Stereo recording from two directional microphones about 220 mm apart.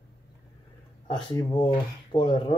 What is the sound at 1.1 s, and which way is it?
Speech, 20° left (ahead or behind).